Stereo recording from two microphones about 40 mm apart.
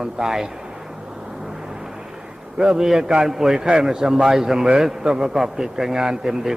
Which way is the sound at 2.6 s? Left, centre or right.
Centre.